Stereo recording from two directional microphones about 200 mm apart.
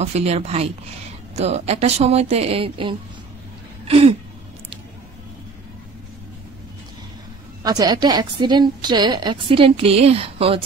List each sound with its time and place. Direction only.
0.0 s speech: 30° right (ahead or behind)
3.8 s a sound: 30° right (ahead or behind)
7.6 s a woman's voice: 20° right (ahead or behind)